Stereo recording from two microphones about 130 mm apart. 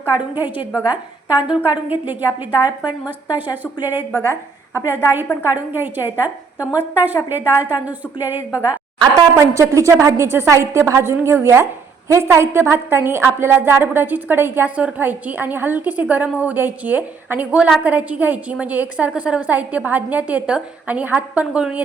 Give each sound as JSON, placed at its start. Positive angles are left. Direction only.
{"t": 0.0, "sound": "a woman's voice", "side_deg": -15}
{"t": 4.1, "sound": "a woman's voice", "side_deg": 20}
{"t": 5.5, "sound": "a woman's voice", "side_deg": -15}
{"t": 9.0, "sound": "a woman's voice", "side_deg": -25}